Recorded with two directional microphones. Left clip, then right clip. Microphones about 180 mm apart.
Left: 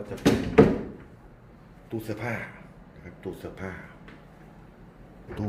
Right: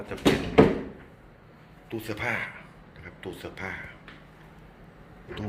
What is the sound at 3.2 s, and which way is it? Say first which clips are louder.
Speech: right 1 dB; 25° left (ahead or behind).